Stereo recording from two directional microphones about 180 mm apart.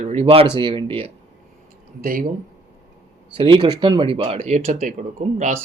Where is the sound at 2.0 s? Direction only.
50° right (ahead or behind).